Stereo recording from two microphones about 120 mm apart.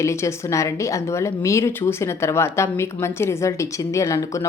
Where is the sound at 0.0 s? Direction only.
25° left (ahead or behind).